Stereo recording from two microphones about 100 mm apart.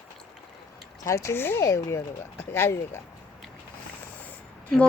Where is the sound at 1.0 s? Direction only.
30° left (ahead or behind).